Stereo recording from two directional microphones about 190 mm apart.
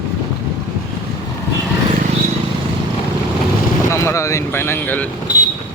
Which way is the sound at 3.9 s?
15° left (ahead or behind).